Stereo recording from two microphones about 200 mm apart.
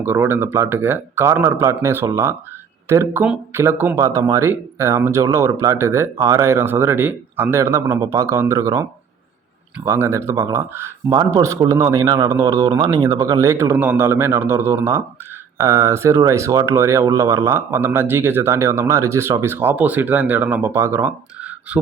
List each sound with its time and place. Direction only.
0.0 s speech: 10° right (ahead or behind)